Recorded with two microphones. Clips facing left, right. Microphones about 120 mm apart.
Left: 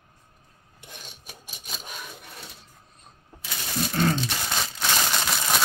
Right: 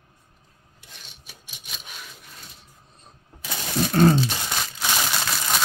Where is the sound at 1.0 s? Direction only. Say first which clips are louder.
Left 4 dB; 45° left (ahead or behind).